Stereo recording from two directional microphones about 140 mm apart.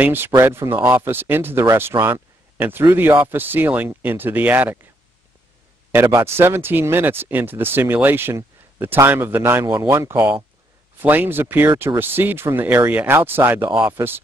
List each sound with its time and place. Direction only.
0.0 s speech: 15° right (ahead or behind)
5.9 s speech: 15° right (ahead or behind)